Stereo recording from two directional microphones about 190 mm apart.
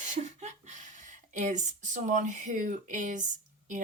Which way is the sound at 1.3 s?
40° right (ahead or behind).